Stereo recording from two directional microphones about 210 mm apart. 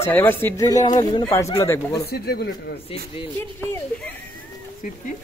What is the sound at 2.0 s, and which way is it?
Speech, 50° left (ahead or behind).